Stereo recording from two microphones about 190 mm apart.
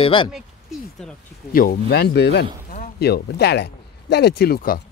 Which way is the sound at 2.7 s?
55° left (ahead or behind).